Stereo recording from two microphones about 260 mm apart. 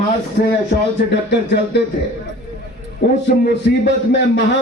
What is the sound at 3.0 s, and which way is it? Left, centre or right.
A man's voice, left.